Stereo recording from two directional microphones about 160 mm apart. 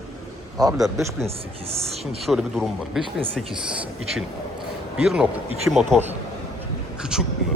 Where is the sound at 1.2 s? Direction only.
40° right (ahead or behind).